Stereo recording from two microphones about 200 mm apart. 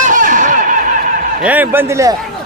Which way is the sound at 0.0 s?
40° right (ahead or behind).